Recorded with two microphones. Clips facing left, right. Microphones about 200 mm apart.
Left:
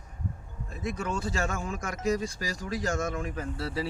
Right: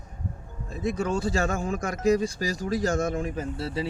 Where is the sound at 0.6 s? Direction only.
30° right (ahead or behind).